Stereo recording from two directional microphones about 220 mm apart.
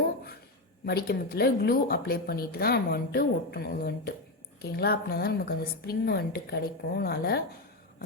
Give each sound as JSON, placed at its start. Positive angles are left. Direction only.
{"t": 0.9, "sound": "a woman's voice", "side_deg": 45}